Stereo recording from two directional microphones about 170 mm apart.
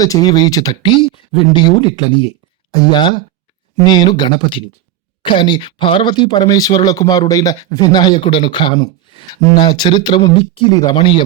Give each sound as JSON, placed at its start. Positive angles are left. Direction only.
{"t": 0.0, "sound": "speech", "side_deg": 20}